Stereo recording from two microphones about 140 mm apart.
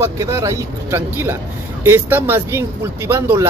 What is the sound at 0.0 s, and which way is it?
Speech, 20° right (ahead or behind).